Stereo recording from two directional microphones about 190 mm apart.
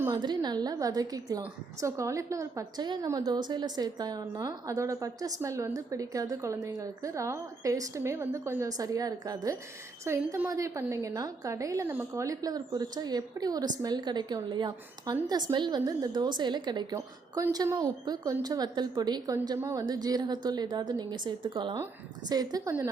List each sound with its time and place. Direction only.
0.0 s a woman's voice: 20° right (ahead or behind)